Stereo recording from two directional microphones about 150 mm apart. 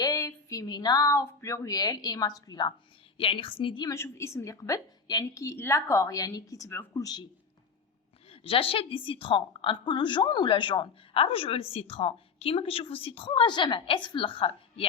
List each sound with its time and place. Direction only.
0.0 s a woman's voice: 20° left (ahead or behind)
3.8 s a woman's voice: 20° left (ahead or behind)
8.3 s a woman's voice: 40° left (ahead or behind)